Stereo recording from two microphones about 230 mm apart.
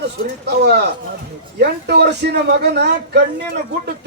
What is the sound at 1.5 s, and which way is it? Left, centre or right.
A man's voice, right.